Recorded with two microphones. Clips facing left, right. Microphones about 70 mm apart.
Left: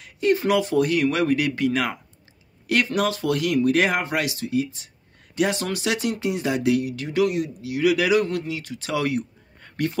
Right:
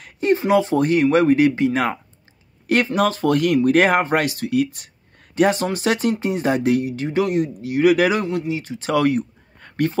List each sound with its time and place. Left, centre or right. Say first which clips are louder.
0.2 s speech: right 3 dB; right
4.5 s speech: right 4 dB; right
5.3 s speech: right 5 dB; right
8.3 s speech: right 4 dB; right
8.9 s a sound: right 6 dB; right